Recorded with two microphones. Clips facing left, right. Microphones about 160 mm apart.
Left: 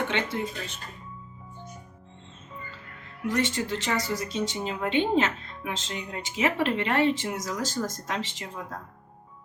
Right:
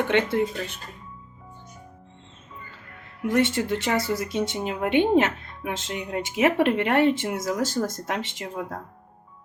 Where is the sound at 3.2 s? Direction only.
55° right (ahead or behind).